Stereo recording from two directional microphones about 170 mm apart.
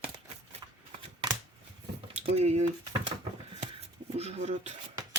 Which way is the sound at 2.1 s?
40° right (ahead or behind).